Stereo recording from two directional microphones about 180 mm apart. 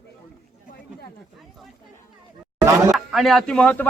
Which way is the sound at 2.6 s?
15° right (ahead or behind).